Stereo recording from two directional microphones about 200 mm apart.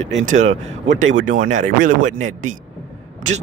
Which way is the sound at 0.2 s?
40° right (ahead or behind).